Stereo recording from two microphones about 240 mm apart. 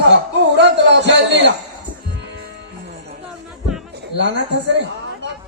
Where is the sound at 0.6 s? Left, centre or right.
Right.